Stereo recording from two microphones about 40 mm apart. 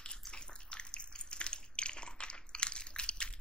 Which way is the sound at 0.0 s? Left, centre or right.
Left.